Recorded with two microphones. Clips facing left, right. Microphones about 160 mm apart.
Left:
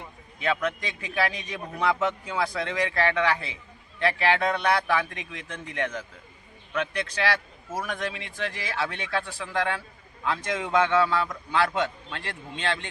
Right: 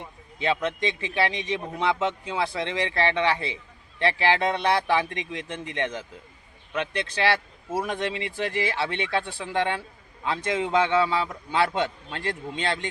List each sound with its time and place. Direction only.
0.3 s a man's voice: 25° right (ahead or behind)